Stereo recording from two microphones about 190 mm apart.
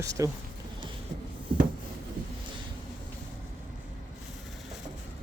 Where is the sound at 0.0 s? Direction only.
15° right (ahead or behind).